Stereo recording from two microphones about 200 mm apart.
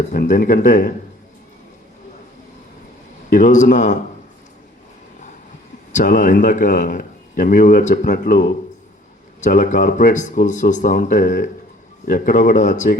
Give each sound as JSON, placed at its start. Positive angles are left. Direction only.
{"t": 0.1, "sound": "speech", "side_deg": 45}
{"t": 3.2, "sound": "speech", "side_deg": 40}
{"t": 5.9, "sound": "speech", "side_deg": 40}